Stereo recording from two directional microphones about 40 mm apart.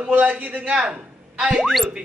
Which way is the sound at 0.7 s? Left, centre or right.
Right.